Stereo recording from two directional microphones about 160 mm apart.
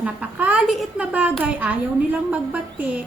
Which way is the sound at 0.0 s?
10° right (ahead or behind).